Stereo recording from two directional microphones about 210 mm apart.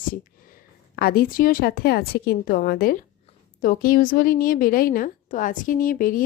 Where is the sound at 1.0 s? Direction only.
45° left (ahead or behind).